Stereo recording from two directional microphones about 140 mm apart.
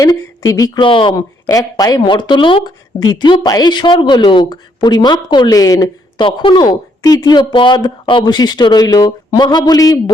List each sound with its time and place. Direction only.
0.0 s speech: 25° left (ahead or behind)
0.9 s speech: 35° left (ahead or behind)
6.2 s speech: 35° left (ahead or behind)